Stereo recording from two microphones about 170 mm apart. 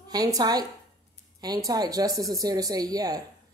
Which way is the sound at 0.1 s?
25° right (ahead or behind).